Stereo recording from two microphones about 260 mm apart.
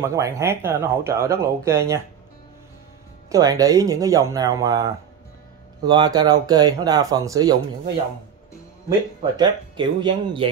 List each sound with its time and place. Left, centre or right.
0.0 s speech: centre
3.3 s speech: centre
8.8 s speech: centre